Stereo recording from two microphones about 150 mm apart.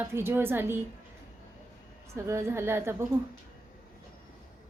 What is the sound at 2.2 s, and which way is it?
Speech, 15° right (ahead or behind).